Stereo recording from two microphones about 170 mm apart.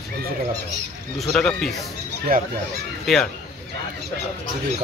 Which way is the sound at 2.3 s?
60° right (ahead or behind).